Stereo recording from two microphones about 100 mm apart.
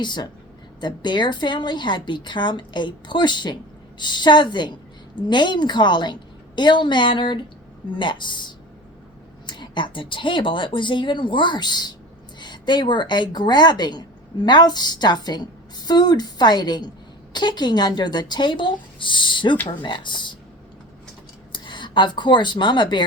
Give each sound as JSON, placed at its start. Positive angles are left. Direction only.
{"t": 0.0, "sound": "a woman's voice", "side_deg": 50}
{"t": 9.5, "sound": "a woman's voice", "side_deg": 55}
{"t": 21.5, "sound": "speech", "side_deg": 50}